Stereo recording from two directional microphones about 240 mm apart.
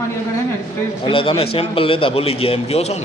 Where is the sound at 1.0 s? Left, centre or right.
Left.